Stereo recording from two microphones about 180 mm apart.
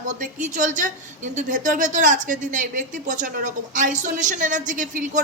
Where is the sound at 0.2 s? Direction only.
45° right (ahead or behind).